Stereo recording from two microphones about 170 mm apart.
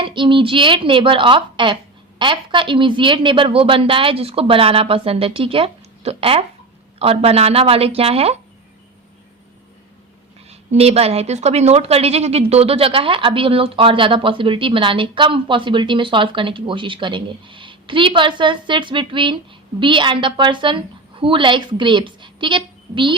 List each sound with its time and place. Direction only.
0.0 s a woman's voice: 30° right (ahead or behind)
10.5 s a woman's voice: 35° right (ahead or behind)